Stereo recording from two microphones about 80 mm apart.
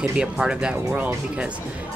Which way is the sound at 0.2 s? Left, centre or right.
Centre.